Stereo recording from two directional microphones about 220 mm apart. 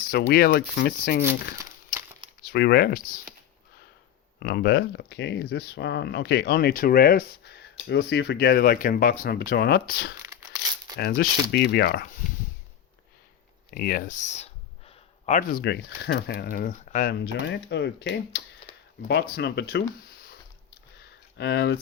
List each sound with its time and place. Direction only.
0.1 s speech: 45° left (ahead or behind)
1.3 s crumpling: 10° right (ahead or behind)
2.5 s speech: 45° left (ahead or behind)
4.4 s speech: 45° left (ahead or behind)
10.2 s crumpling: 15° right (ahead or behind)
10.9 s speech: 45° left (ahead or behind)
13.7 s speech: 40° left (ahead or behind)
17.1 s speech: 50° left (ahead or behind)
21.3 s speech: 50° left (ahead or behind)